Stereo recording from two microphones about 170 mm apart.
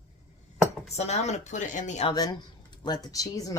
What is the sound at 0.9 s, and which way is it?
Speech, 40° left (ahead or behind).